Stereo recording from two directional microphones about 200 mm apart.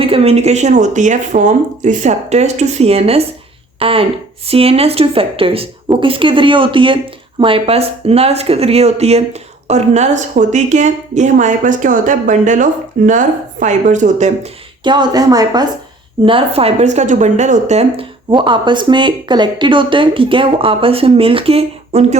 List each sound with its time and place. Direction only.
0.0 s speech: 30° right (ahead or behind)
14.8 s a woman's voice: 20° right (ahead or behind)